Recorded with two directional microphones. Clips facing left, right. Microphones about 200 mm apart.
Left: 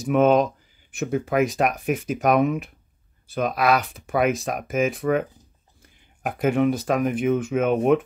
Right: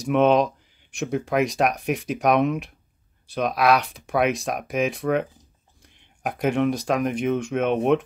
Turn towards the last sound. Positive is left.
turn(degrees=5)  # may be behind; listen again after turning